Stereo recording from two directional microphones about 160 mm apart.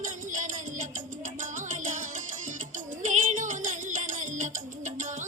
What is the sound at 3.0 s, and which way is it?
Music, 50° right (ahead or behind).